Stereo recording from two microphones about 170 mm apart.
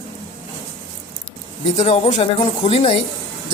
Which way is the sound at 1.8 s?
40° left (ahead or behind).